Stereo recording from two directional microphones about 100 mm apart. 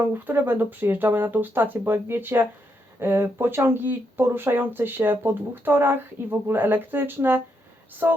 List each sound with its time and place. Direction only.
0.0 s speech: 20° right (ahead or behind)